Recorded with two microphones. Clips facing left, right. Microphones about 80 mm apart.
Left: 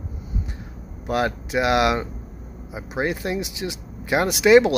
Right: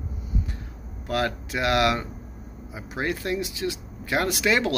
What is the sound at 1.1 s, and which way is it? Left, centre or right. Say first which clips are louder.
Speech: left 4 dB; centre.